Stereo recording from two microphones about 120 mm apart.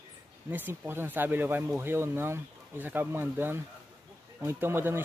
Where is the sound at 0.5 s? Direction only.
15° right (ahead or behind).